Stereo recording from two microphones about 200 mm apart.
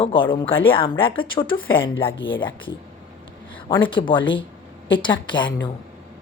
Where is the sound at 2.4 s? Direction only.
25° left (ahead or behind).